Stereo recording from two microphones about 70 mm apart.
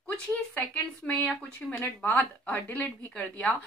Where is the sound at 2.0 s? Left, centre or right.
Left.